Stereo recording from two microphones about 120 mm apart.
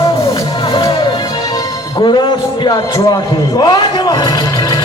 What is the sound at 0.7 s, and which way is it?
Music, 35° left (ahead or behind).